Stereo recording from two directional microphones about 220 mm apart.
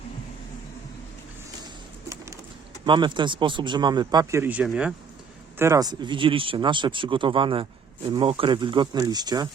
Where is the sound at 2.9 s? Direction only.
20° right (ahead or behind).